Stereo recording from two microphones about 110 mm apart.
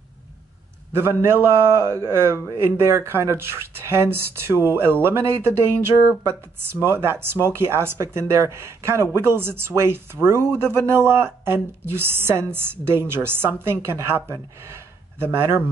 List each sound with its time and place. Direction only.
0.9 s a man's voice: 25° right (ahead or behind)